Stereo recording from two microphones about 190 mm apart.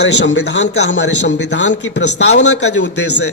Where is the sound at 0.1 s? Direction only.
65° left (ahead or behind).